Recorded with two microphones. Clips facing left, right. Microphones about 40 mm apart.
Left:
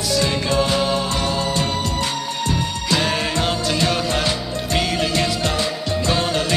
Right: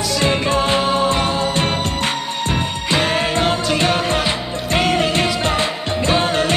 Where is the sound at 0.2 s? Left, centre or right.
Right.